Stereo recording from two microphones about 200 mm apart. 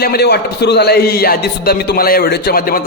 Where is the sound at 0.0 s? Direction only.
50° left (ahead or behind).